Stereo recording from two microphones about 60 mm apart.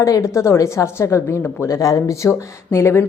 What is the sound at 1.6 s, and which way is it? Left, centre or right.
Speech, left.